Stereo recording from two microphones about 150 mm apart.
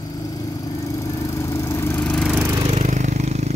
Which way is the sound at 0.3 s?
25° left (ahead or behind).